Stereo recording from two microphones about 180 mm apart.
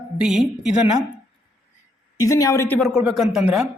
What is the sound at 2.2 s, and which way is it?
Speech, 20° left (ahead or behind).